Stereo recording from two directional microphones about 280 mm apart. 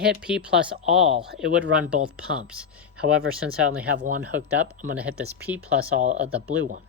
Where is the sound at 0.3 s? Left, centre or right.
Centre.